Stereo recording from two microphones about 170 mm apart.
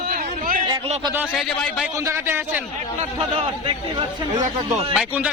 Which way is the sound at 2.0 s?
15° right (ahead or behind).